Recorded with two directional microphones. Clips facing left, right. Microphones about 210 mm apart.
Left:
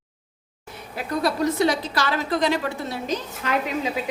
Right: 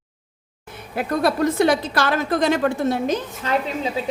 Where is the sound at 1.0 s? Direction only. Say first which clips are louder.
Right 4 dB; 55° right (ahead or behind).